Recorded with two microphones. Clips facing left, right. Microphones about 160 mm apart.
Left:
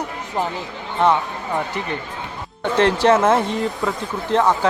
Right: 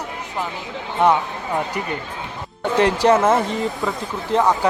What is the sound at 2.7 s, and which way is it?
A man's voice, 10° right (ahead or behind).